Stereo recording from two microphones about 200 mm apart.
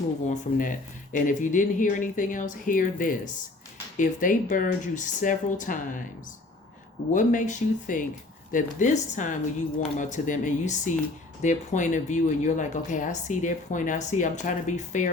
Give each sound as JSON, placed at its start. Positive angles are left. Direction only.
{"t": 0.3, "sound": "speech", "side_deg": 40}
{"t": 7.1, "sound": "speech", "side_deg": 40}